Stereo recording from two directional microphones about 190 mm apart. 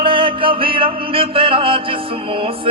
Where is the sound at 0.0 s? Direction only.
30° right (ahead or behind).